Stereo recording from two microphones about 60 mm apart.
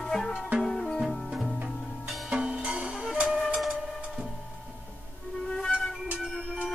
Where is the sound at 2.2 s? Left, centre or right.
Centre.